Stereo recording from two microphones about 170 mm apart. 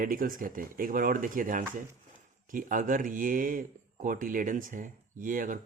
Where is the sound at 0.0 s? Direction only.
55° right (ahead or behind).